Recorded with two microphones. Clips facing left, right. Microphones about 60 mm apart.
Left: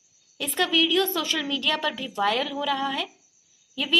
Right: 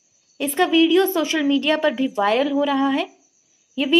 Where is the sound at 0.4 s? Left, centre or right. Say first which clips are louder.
Right 7 dB; right.